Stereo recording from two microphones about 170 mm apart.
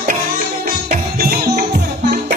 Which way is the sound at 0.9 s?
55° right (ahead or behind).